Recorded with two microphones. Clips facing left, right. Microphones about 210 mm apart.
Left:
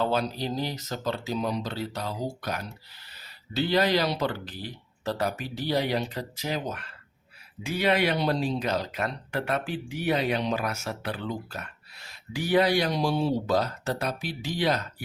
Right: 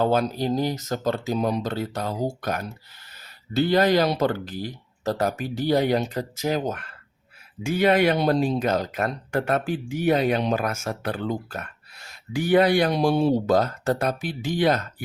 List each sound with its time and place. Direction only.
0.0 s speech: 50° right (ahead or behind)